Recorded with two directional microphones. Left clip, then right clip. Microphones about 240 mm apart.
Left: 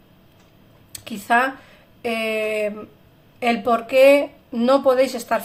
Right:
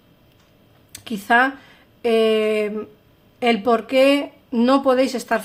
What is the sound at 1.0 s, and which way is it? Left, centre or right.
A woman's voice, right.